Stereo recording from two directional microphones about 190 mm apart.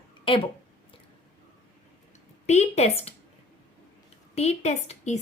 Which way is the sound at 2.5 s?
35° left (ahead or behind).